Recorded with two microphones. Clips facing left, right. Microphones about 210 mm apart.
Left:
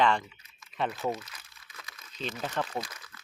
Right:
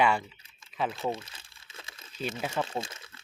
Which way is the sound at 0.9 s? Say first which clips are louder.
Even; 25° right (ahead or behind).